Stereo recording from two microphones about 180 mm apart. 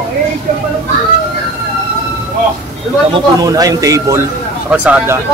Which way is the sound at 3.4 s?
20° right (ahead or behind).